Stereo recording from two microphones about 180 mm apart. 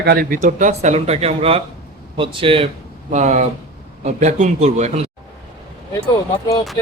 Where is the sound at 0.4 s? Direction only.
40° right (ahead or behind).